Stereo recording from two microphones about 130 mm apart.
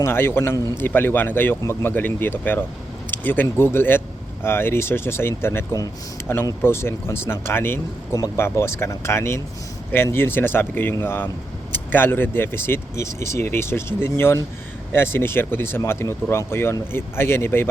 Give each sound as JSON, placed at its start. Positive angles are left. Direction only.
{"t": 0.0, "sound": "speech", "side_deg": 20}